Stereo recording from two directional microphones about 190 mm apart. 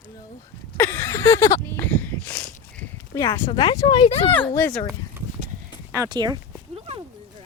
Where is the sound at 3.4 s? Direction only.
25° left (ahead or behind).